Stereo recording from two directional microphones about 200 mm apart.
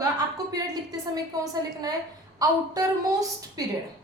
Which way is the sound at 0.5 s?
20° right (ahead or behind).